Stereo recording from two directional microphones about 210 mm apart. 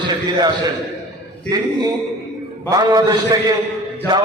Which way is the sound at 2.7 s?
20° right (ahead or behind).